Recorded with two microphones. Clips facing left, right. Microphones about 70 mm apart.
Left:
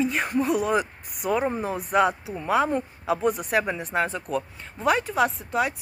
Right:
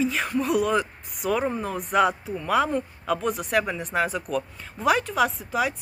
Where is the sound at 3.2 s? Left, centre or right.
Centre.